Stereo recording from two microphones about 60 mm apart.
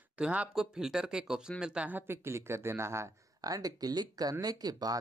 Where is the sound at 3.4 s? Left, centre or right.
Right.